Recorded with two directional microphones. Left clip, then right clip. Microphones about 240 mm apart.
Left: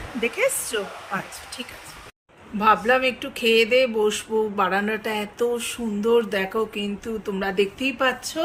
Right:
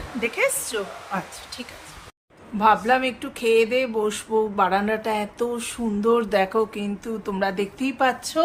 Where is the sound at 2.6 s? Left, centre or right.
Centre.